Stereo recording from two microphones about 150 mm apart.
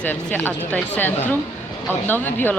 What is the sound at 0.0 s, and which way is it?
Speech, 10° left (ahead or behind).